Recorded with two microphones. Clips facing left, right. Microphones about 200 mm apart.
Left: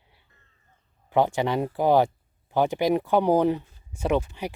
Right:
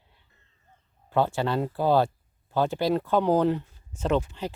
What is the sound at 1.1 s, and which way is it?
Speech, 15° left (ahead or behind).